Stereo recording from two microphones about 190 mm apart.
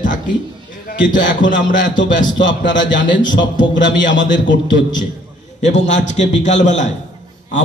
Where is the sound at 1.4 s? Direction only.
75° left (ahead or behind).